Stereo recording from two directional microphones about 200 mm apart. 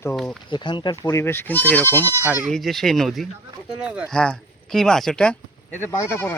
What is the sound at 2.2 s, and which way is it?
Speech, 10° right (ahead or behind).